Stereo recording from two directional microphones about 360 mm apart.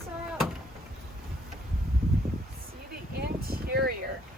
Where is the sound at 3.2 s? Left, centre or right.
Right.